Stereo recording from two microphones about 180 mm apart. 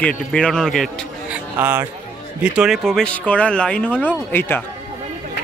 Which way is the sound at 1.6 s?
10° right (ahead or behind).